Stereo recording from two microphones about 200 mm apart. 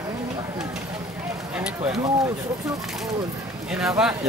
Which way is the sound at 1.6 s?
5° right (ahead or behind).